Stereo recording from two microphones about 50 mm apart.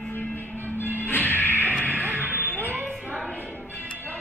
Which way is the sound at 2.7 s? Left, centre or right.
Right.